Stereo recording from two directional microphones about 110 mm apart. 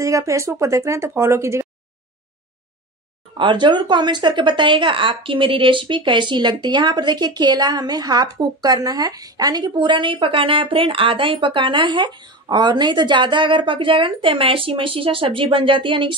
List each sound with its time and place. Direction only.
0.0 s speech: 30° right (ahead or behind)
3.3 s speech: 45° right (ahead or behind)